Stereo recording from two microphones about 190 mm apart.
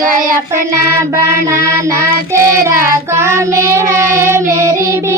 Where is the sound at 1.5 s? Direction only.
15° right (ahead or behind).